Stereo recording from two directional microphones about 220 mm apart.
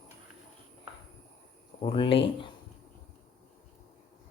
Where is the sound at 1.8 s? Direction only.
25° left (ahead or behind).